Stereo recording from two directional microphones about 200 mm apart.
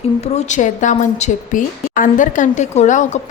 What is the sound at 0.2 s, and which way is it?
A woman's voice, 35° left (ahead or behind).